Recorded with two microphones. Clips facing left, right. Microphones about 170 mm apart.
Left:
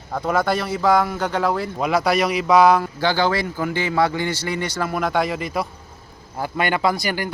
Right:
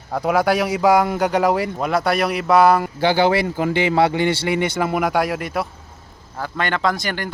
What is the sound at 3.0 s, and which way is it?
A man's voice, 20° right (ahead or behind).